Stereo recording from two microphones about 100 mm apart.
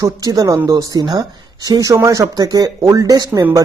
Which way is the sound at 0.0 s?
35° right (ahead or behind).